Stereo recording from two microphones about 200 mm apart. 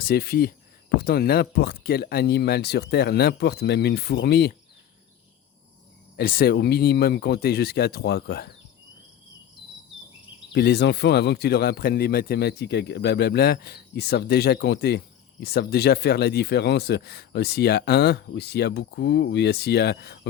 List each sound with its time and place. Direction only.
0.0 s speech: 50° left (ahead or behind)
6.1 s speech: 50° left (ahead or behind)
10.5 s speech: 55° left (ahead or behind)